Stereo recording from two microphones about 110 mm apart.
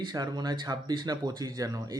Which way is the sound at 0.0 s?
40° right (ahead or behind).